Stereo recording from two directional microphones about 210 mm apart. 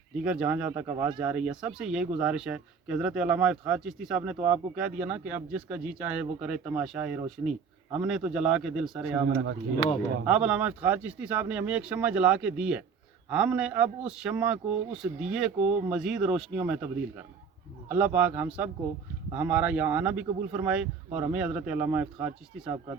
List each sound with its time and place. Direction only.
0.2 s speech: 5° right (ahead or behind)
1.2 s speech: 5° right (ahead or behind)
10.2 s speech: 5° right (ahead or behind)